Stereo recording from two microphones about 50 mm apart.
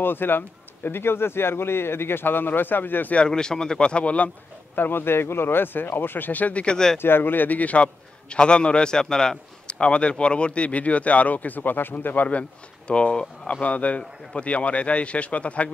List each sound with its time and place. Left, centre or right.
0.0 s speech: left
3.2 s a man's voice: centre
4.7 s speech: left
6.6 s speech: centre
7.0 s a man's voice: left; by 13.5 s centre
13.5 s a man's voice: left